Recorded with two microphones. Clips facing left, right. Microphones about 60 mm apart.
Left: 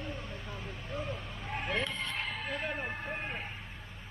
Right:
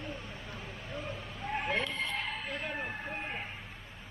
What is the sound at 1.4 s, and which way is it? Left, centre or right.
Vehicle, centre.